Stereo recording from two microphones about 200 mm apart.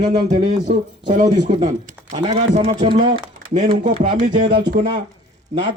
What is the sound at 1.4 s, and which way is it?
Speech, 30° right (ahead or behind).